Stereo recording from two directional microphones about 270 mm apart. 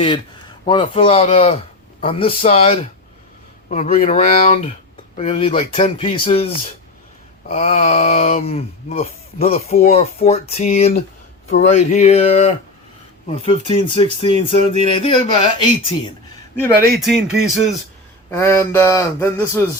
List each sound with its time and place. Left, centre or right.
0.0 s a man's voice: centre
17.0 s speech: centre